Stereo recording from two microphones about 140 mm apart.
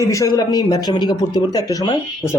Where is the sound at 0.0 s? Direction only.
20° left (ahead or behind).